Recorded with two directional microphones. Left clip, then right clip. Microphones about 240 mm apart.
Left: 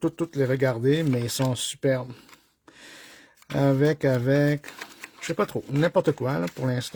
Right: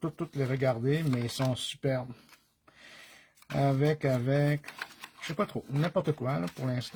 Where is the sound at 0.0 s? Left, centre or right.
Left.